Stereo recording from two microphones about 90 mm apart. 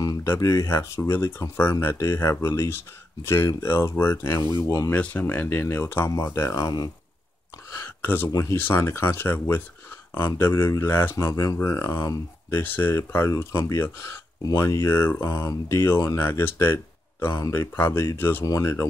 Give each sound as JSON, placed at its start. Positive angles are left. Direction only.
{"t": 0.2, "sound": "speech", "side_deg": 35}
{"t": 4.9, "sound": "speech", "side_deg": 20}
{"t": 6.0, "sound": "speech", "side_deg": 35}
{"t": 7.7, "sound": "a sound", "side_deg": 20}
{"t": 8.3, "sound": "speech", "side_deg": 35}
{"t": 11.1, "sound": "speech", "side_deg": 40}
{"t": 11.6, "sound": "speech", "side_deg": 25}
{"t": 18.4, "sound": "speech", "side_deg": 40}